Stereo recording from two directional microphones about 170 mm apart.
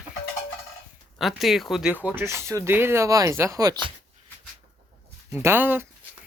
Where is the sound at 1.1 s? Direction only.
Centre (ahead or behind); by 3.9 s 25° right (ahead or behind).